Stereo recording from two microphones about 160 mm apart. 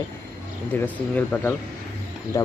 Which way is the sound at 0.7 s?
10° left (ahead or behind).